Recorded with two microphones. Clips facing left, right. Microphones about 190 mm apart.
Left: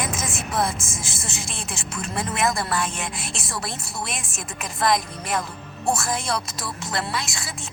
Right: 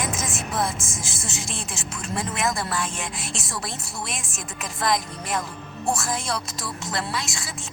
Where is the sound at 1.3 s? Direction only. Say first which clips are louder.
Right 1 dB; 60° left (ahead or behind).